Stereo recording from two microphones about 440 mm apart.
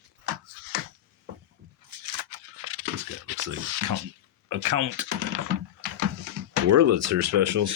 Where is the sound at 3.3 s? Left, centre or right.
Right.